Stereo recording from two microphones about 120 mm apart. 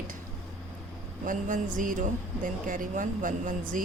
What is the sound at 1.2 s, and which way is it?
A woman's voice, 90° right.